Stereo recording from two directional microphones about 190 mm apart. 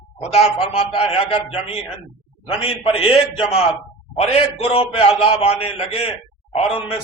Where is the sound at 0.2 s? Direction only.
35° left (ahead or behind).